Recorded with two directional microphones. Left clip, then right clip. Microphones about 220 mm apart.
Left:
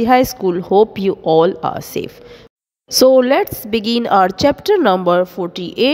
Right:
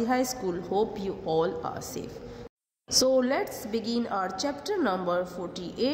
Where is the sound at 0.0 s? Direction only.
40° left (ahead or behind).